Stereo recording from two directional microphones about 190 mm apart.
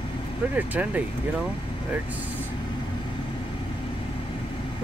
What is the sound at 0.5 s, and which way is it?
Speech, 10° right (ahead or behind).